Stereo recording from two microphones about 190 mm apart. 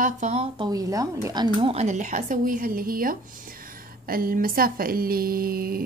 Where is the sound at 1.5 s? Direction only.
30° right (ahead or behind).